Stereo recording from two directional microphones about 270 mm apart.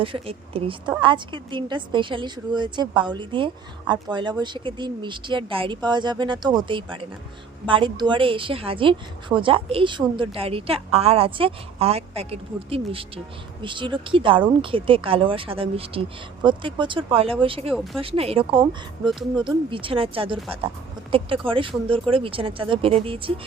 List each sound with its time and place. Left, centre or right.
0.0 s a woman's voice: centre
17.7 s speech: centre
18.0 s a woman's voice: right